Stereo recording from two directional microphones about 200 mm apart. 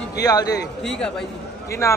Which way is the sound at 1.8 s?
15° left (ahead or behind).